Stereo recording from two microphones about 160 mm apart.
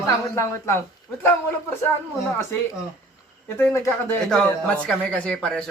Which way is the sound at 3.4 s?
15° left (ahead or behind).